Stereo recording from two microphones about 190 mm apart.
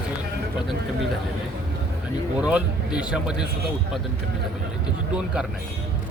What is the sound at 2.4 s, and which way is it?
Speech, 5° right (ahead or behind).